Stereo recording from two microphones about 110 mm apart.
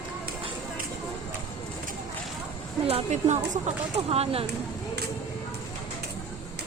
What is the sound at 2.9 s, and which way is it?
Speech, 80° right.